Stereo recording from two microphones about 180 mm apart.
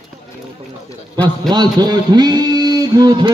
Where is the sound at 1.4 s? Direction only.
25° right (ahead or behind).